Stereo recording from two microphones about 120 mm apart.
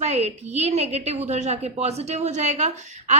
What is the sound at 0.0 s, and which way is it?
A woman's voice, 65° right (ahead or behind).